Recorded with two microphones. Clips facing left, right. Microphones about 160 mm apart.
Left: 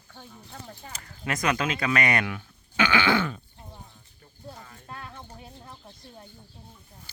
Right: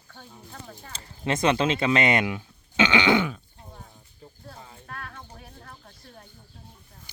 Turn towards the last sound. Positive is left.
turn(degrees=20)  # may be behind; listen again after turning